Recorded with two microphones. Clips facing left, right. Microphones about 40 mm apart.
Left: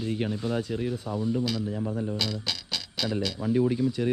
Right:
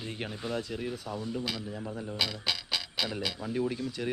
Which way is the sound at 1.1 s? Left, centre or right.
Centre.